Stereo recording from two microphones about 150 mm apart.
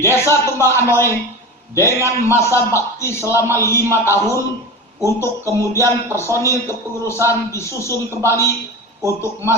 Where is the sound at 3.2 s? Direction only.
15° right (ahead or behind).